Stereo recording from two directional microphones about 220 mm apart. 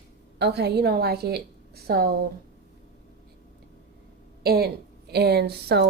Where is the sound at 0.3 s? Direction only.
50° right (ahead or behind).